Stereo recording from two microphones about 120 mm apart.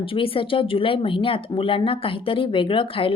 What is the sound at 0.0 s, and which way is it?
Speech, 50° left (ahead or behind).